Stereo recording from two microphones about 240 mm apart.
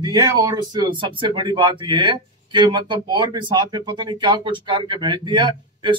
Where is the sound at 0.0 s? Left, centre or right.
Centre.